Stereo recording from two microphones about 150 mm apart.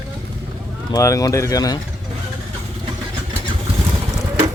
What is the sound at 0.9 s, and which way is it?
Speech, 20° left (ahead or behind).